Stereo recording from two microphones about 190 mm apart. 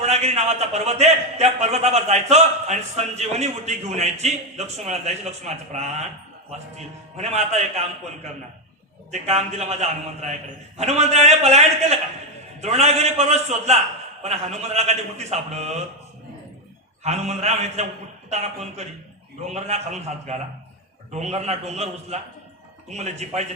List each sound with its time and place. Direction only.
0.0 s a man's voice: 35° right (ahead or behind)
7.2 s a man's voice: 35° right (ahead or behind)
9.1 s a man's voice: 35° right (ahead or behind)
17.0 s a man's voice: 35° right (ahead or behind)